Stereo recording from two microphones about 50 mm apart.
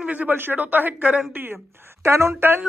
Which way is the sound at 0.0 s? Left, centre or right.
Right.